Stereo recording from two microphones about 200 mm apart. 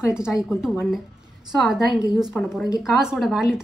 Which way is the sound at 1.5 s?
Centre (ahead or behind).